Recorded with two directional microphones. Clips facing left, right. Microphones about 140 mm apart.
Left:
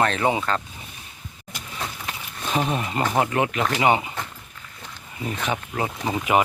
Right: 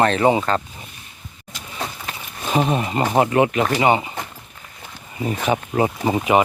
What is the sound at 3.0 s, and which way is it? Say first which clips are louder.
Speech: right 5 dB; 15° right (ahead or behind).